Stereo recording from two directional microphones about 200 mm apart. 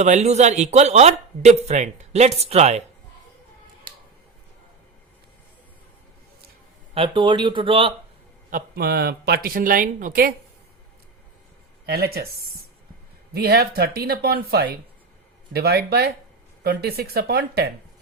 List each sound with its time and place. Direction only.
0.0 s speech: 35° right (ahead or behind)
6.9 s speech: 25° right (ahead or behind)
8.4 s speech: 45° right (ahead or behind)
11.9 s speech: 50° right (ahead or behind)
13.3 s speech: 50° right (ahead or behind)